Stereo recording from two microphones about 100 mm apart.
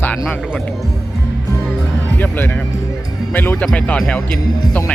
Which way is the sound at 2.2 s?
20° left (ahead or behind).